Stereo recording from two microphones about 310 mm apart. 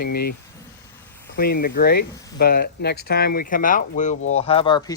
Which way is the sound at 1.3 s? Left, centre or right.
Left.